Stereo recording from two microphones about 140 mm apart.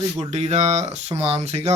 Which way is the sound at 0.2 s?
50° right (ahead or behind).